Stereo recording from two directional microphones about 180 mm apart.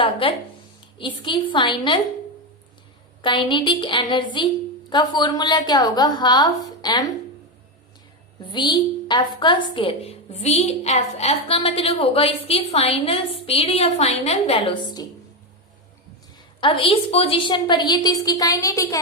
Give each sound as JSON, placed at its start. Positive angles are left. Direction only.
{"t": 0.0, "sound": "a woman's voice", "side_deg": 30}
{"t": 3.2, "sound": "a woman's voice", "side_deg": 25}
{"t": 8.4, "sound": "a woman's voice", "side_deg": 25}
{"t": 16.6, "sound": "a woman's voice", "side_deg": 30}